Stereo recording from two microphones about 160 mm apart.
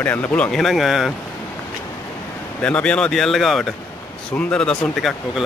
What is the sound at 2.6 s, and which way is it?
Speech, 5° left (ahead or behind).